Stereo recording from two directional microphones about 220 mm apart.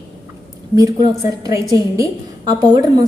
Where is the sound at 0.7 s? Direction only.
15° right (ahead or behind).